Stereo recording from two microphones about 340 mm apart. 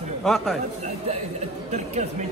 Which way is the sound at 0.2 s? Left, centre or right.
Centre.